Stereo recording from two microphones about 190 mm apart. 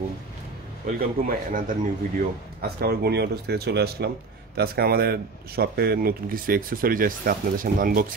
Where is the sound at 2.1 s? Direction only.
55° right (ahead or behind).